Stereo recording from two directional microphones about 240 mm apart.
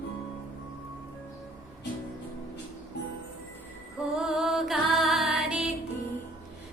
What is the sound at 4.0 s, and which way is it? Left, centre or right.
Music, centre.